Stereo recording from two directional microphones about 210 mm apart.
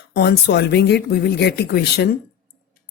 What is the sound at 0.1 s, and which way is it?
Speech, 50° left (ahead or behind).